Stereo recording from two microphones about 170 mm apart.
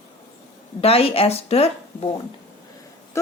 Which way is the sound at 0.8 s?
35° left (ahead or behind).